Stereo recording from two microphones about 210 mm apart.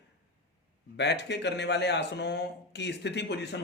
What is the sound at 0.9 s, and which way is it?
Speech, 55° left (ahead or behind).